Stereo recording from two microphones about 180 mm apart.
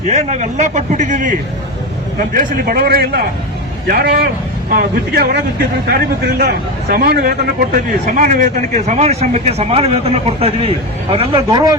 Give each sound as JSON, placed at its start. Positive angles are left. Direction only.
{"t": 0.1, "sound": "a man's voice", "side_deg": -40}